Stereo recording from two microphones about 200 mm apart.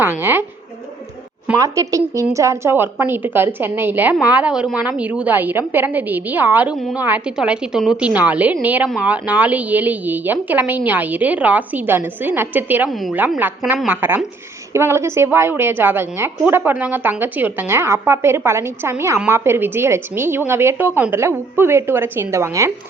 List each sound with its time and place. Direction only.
0.0 s a woman's voice: 10° right (ahead or behind)
1.5 s a woman's voice: 15° right (ahead or behind)